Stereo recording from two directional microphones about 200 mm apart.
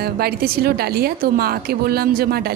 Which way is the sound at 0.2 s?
50° right (ahead or behind).